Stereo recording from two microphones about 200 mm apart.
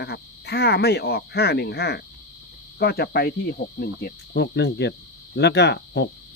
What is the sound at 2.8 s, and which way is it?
Cricket, 50° left (ahead or behind).